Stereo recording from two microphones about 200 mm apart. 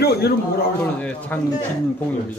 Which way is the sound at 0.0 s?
55° left (ahead or behind).